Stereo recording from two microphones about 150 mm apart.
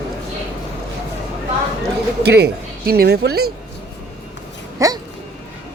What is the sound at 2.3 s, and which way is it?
Speech, 90° right.